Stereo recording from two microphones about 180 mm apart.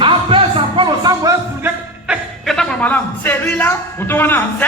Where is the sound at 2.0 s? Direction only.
Centre (ahead or behind).